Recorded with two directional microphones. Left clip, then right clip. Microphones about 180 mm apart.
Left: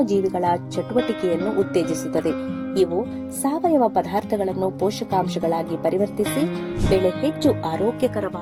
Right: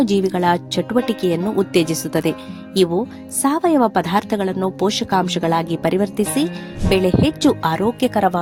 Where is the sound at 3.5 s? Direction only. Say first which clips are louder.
Right 2 dB; 60° right (ahead or behind).